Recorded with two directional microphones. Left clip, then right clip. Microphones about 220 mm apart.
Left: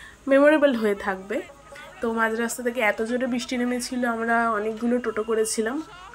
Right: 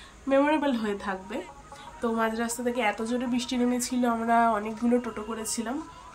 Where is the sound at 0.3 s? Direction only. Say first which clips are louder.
Left 7 dB; 15° left (ahead or behind).